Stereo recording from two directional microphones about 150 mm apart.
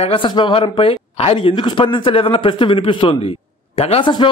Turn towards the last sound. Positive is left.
turn(degrees=35)  # may be behind; listen again after turning